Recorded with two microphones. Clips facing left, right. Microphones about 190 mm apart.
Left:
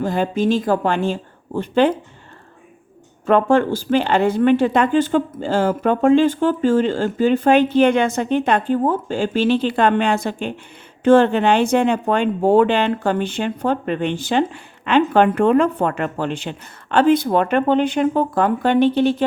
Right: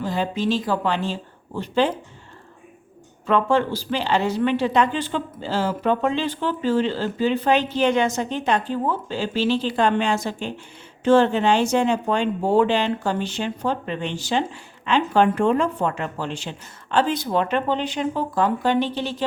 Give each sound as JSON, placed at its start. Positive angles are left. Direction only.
{"t": 0.0, "sound": "speech", "side_deg": 50}
{"t": 3.2, "sound": "speech", "side_deg": 50}